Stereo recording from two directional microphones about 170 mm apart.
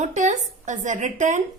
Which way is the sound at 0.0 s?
45° right (ahead or behind).